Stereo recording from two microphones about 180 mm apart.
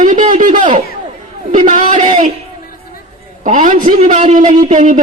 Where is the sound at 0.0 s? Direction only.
45° right (ahead or behind).